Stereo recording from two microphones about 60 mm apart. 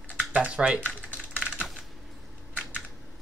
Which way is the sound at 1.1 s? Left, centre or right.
Centre.